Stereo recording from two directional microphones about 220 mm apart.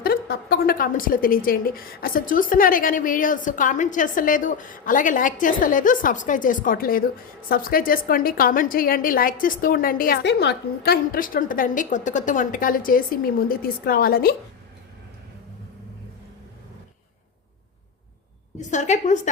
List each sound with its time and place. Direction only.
0.0 s a woman's voice: 45° left (ahead or behind)
18.7 s a woman's voice: 35° left (ahead or behind)